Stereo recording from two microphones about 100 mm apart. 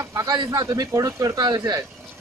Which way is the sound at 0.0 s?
35° right (ahead or behind).